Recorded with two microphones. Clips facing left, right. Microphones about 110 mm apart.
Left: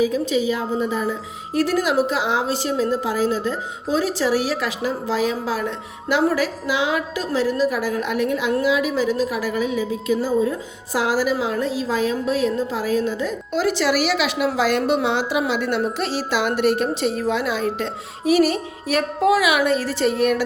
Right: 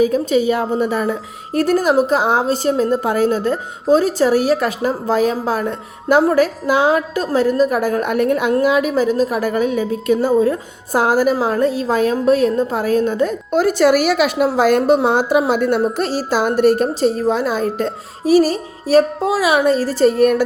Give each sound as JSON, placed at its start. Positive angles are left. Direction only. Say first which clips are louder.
{"t": 0.0, "sound": "a woman's voice", "louder": "right 5 dB", "side_deg": -50}